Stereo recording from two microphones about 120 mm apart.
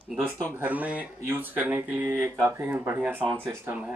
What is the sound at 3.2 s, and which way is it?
Speech, 10° left (ahead or behind).